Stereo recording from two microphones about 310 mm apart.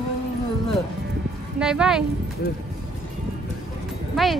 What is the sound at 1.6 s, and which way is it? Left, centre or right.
Speech, centre.